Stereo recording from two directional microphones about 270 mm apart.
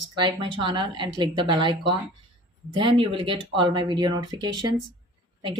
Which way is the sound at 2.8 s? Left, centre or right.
Centre.